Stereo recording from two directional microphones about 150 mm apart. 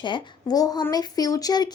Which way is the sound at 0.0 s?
30° left (ahead or behind).